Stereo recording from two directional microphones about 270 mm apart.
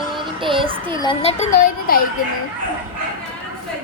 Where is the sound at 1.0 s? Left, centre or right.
Left.